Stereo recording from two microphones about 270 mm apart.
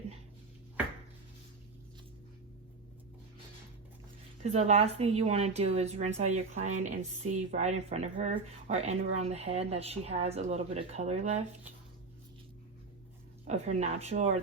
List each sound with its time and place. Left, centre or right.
4.4 s speech: right
13.4 s speech: right